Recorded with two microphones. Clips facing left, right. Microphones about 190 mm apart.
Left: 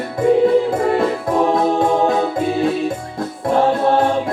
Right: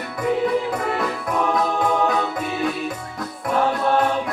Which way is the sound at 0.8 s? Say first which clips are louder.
Left 7 dB; 30° left (ahead or behind).